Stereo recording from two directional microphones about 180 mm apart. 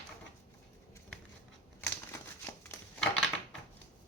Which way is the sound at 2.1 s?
15° left (ahead or behind).